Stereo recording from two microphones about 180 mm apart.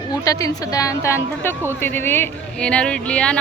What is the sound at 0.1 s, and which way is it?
A woman's voice, 20° left (ahead or behind).